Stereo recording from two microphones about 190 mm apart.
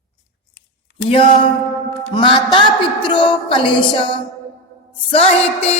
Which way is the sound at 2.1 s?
25° left (ahead or behind).